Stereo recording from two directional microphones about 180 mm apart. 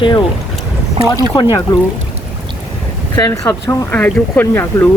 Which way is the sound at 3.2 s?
20° left (ahead or behind).